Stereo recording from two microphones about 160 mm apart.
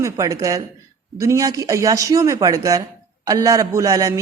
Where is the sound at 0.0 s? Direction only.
20° right (ahead or behind).